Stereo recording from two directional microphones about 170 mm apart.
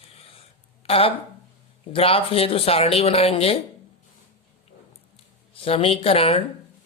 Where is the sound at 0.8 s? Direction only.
35° left (ahead or behind).